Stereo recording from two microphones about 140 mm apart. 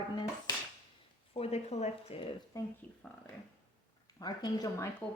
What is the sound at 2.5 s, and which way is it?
Speech, 25° left (ahead or behind).